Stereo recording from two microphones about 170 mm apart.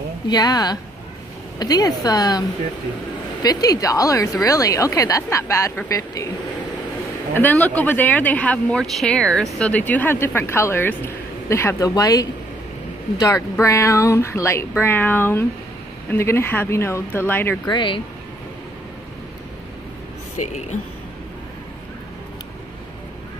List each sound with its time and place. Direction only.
0.3 s a woman's voice: 25° left (ahead or behind)
3.4 s a woman's voice: 20° left (ahead or behind)
7.3 s a woman's voice: 10° left (ahead or behind)
17.6 s a woman's voice: 30° left (ahead or behind)